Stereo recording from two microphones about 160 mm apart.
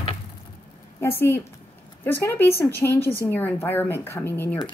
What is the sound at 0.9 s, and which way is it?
Speech, 15° left (ahead or behind).